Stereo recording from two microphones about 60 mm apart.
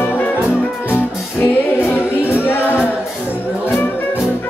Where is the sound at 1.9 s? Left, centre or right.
Left.